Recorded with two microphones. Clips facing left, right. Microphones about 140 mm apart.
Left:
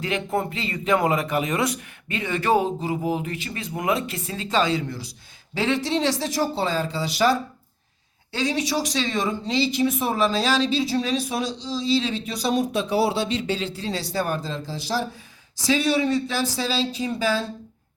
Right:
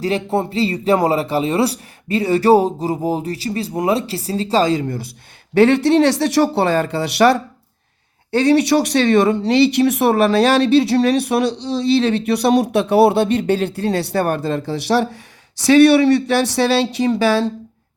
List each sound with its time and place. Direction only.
0.0 s speech: 35° right (ahead or behind); by 5.1 s 55° right (ahead or behind)
5.5 s speech: 65° right (ahead or behind); by 17.5 s 80° right